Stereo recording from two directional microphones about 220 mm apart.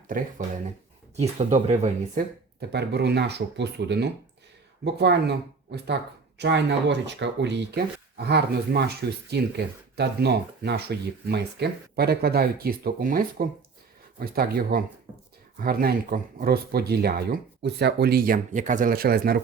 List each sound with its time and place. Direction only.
0.1 s speech: 40° right (ahead or behind)
2.6 s speech: 50° right (ahead or behind)